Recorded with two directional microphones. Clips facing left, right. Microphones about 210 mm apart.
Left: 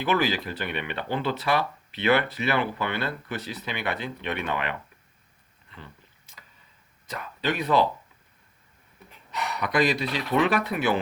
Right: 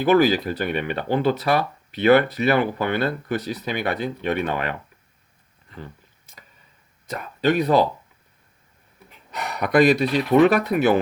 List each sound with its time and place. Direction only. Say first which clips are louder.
0.0 s speech: right 8 dB; 40° right (ahead or behind)
5.7 s speech: right 8 dB; 40° right (ahead or behind)
7.1 s speech: right 8 dB; 40° right (ahead or behind)
9.3 s speech: right 7 dB; 45° right (ahead or behind)